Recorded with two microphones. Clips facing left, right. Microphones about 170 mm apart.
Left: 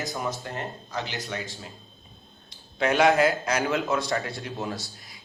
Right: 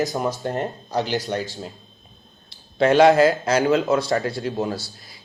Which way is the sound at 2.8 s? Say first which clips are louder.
Right 6 dB; 30° right (ahead or behind).